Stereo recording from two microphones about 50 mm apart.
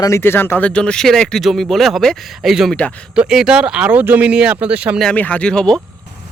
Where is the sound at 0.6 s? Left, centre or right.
Centre.